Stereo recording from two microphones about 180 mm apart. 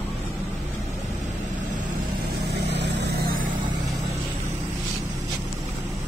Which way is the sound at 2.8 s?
75° right (ahead or behind).